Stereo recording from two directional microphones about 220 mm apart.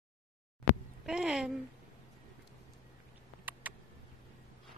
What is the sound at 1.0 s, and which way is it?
Speech, 5° right (ahead or behind).